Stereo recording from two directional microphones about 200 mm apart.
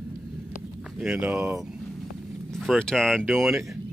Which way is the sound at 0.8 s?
Centre (ahead or behind).